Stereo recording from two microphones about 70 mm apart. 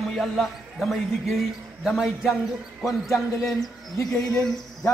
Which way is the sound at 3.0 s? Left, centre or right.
Left.